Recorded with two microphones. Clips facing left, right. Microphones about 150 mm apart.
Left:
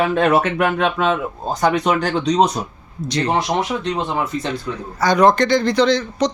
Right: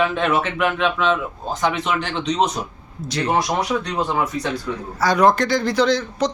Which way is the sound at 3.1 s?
5° right (ahead or behind).